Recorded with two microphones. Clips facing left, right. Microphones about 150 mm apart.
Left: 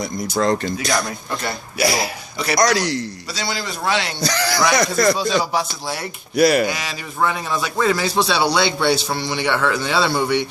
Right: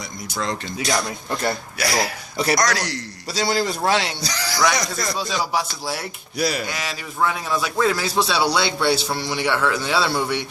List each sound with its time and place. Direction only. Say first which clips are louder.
0.0 s speech: left 8 dB; 45° left (ahead or behind)
1.8 s speech: left 4 dB; 10° left (ahead or behind)
3.3 s a man's voice: right 6 dB; 40° right (ahead or behind)
4.2 s speech: left 3 dB; 55° left (ahead or behind)
5.4 s speech: left 2 dB; 5° right (ahead or behind)
6.3 s speech: left 9 dB; 65° left (ahead or behind)
6.7 s speech: left 3 dB; centre (ahead or behind)